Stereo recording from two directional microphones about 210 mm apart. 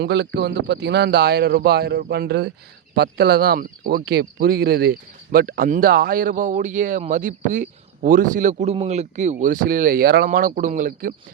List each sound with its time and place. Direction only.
0.0 s speech: 55° right (ahead or behind); by 11.1 s 40° right (ahead or behind)